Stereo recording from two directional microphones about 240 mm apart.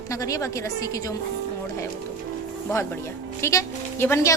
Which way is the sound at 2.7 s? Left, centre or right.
Centre.